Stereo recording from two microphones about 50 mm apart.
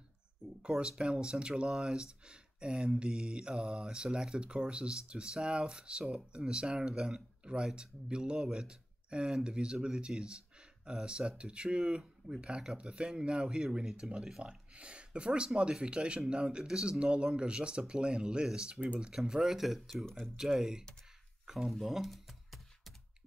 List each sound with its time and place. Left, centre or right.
0.6 s speech: right
21.8 s computer keyboard: centre